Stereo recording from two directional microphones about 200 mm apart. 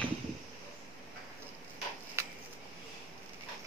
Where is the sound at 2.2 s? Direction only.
15° right (ahead or behind).